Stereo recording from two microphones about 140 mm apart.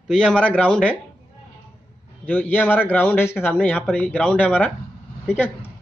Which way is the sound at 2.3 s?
10° left (ahead or behind).